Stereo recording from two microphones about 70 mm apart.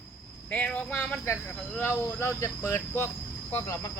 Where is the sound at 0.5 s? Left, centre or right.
Centre.